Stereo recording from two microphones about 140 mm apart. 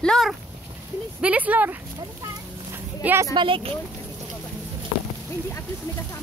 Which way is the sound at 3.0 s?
15° right (ahead or behind).